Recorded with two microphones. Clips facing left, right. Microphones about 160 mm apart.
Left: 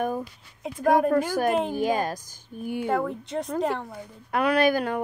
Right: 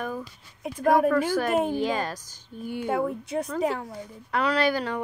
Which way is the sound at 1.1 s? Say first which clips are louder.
Left 1 dB; 45° left (ahead or behind).